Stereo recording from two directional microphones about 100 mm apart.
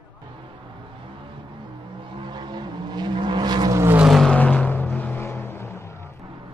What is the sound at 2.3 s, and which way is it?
Vehicle, 45° right (ahead or behind).